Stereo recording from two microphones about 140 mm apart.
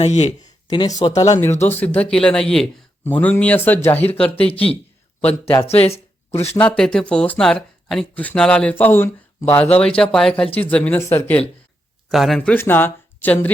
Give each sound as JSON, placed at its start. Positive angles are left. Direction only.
{"t": 0.0, "sound": "speech", "side_deg": 55}
{"t": 0.7, "sound": "speech", "side_deg": 30}
{"t": 4.2, "sound": "speech", "side_deg": 45}
{"t": 5.6, "sound": "speech", "side_deg": 45}
{"t": 6.6, "sound": "speech", "side_deg": 5}
{"t": 12.0, "sound": "speech", "side_deg": 0}
{"t": 12.4, "sound": "speech", "side_deg": 15}